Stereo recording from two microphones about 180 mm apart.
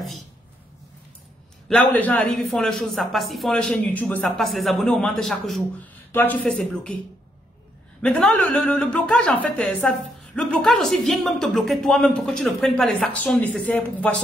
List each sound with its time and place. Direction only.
1.7 s a woman's voice: 10° left (ahead or behind)
8.0 s a woman's voice: 5° left (ahead or behind)